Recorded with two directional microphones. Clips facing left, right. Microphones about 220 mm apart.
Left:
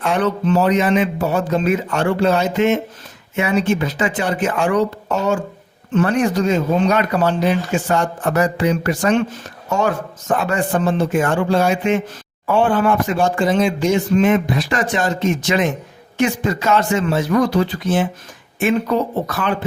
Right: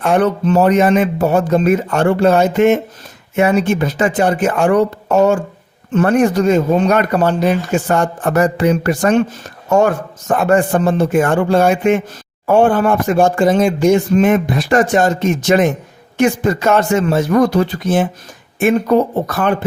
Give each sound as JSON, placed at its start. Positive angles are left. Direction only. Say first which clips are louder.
{"t": 0.0, "sound": "speech", "louder": "right 4 dB", "side_deg": -50}